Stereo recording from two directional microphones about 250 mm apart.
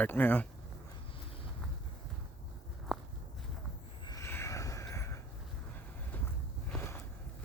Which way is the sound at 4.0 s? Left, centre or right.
Centre.